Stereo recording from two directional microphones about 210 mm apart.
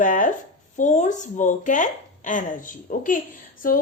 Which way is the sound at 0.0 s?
40° left (ahead or behind).